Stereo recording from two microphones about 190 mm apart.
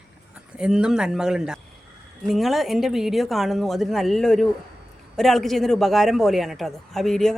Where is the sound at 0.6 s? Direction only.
5° right (ahead or behind).